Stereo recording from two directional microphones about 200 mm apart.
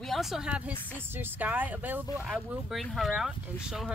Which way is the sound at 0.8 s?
10° left (ahead or behind).